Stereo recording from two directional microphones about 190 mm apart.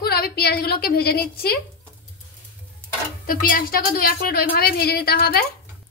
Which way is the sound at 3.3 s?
50° left (ahead or behind).